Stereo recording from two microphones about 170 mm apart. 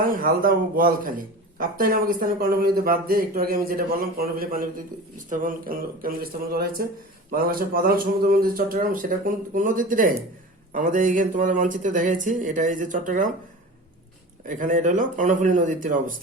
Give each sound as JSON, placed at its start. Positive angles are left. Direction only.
{"t": 0.0, "sound": "speech", "side_deg": -55}
{"t": 14.4, "sound": "speech", "side_deg": -50}